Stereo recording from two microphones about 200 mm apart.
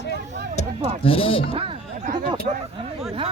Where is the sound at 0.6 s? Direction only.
30° left (ahead or behind).